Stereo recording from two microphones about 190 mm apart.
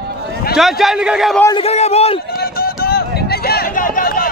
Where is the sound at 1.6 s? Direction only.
35° left (ahead or behind).